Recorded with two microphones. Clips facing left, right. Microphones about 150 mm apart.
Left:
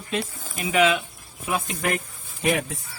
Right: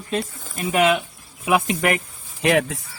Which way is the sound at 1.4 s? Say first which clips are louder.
Right 6 dB; 90° right.